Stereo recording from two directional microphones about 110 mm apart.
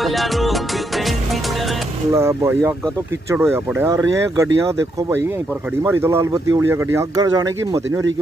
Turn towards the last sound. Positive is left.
turn(degrees=-35)  # may be behind; listen again after turning